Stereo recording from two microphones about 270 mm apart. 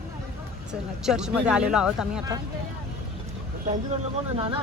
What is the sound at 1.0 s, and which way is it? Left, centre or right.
Speech, centre.